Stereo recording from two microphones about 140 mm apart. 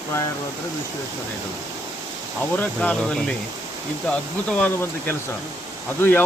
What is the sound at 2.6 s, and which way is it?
Speech, 10° left (ahead or behind).